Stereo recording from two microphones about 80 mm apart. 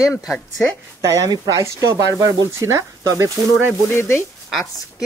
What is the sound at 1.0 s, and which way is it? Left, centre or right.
Speech, right.